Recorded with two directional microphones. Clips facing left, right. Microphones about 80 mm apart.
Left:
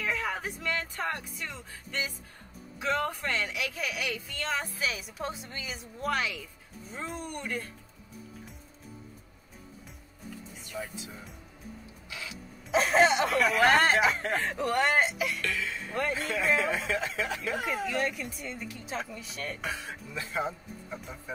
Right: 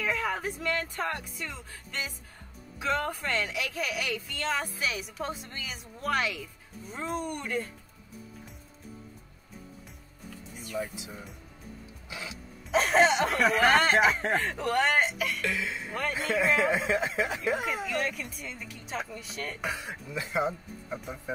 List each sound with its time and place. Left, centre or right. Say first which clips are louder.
0.0 s a woman's voice: right 2 dB; centre
10.7 s a woman's voice: right 4 dB; centre
12.1 s speech: right 2 dB; right
12.7 s a woman's voice: even; centre
15.4 s speech: right 2 dB; centre
15.9 s a woman's voice: left 3 dB; centre
16.5 s speech: right 3 dB; centre
17.8 s a woman's voice: left 1 dB; centre
19.6 s speech: right 2 dB; centre